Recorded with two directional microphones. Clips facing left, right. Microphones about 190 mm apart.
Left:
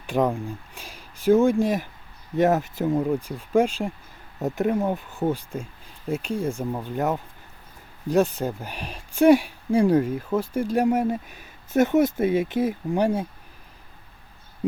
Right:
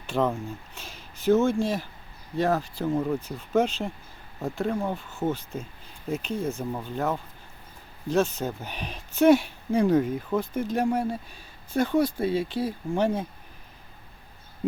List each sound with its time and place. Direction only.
0.1 s speech: 15° left (ahead or behind)